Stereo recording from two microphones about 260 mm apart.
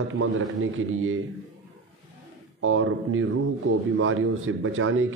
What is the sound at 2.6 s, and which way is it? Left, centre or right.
A man's voice, right.